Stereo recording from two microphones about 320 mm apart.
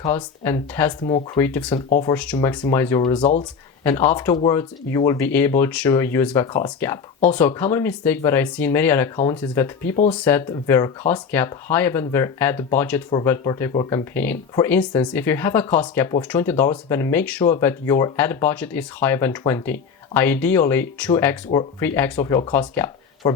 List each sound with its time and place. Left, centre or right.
0.0 s speech: centre